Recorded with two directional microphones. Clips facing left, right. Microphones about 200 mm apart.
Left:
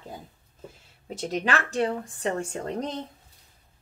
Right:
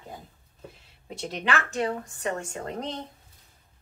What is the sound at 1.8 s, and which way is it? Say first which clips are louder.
Speech: left 2 dB; 30° left (ahead or behind).